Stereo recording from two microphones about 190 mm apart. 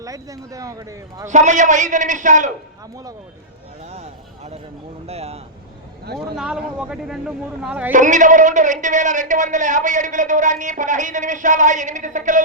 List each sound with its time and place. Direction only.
0.0 s speech: 20° right (ahead or behind)
1.3 s a man's voice: 40° right (ahead or behind)
2.9 s speech: 20° right (ahead or behind)
3.8 s a sound: 35° right (ahead or behind)
5.0 s a man's voice: 35° right (ahead or behind)
6.3 s a man's voice: 5° right (ahead or behind)
7.9 s a man's voice: 40° right (ahead or behind)